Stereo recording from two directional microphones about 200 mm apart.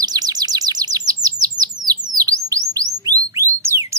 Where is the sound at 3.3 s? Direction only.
15° right (ahead or behind).